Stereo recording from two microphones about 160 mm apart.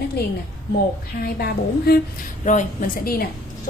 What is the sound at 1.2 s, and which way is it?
Speech, 75° left (ahead or behind).